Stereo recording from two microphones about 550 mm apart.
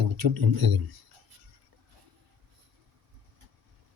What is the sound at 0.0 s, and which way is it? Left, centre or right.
Speech, right.